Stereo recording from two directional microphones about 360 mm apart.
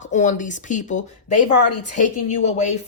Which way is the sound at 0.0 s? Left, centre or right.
Centre.